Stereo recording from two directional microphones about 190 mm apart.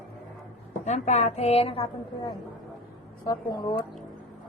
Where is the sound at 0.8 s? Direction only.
40° left (ahead or behind); by 3.7 s 20° left (ahead or behind).